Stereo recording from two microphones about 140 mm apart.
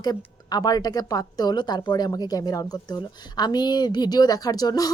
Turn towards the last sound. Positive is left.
turn(degrees=25)  # may be behind; listen again after turning